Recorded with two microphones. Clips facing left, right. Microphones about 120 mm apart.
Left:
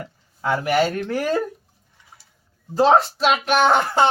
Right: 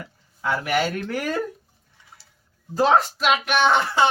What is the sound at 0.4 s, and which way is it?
Speech, 35° left (ahead or behind).